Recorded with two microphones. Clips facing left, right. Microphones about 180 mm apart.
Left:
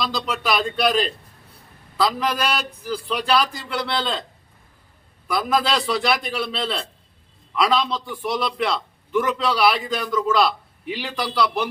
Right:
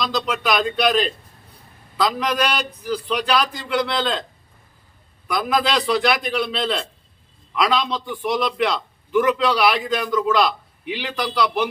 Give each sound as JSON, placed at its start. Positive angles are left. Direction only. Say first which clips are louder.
{"t": 0.0, "sound": "a man's voice", "louder": "right 2 dB", "side_deg": 5}
{"t": 5.3, "sound": "a man's voice", "louder": "right 1 dB", "side_deg": 0}